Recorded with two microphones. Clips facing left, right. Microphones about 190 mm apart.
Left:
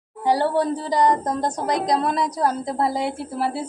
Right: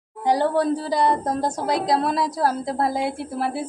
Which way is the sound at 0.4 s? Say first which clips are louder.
Right 1 dB; 15° left (ahead or behind).